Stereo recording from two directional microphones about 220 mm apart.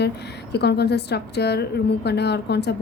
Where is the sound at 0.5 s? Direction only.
50° left (ahead or behind).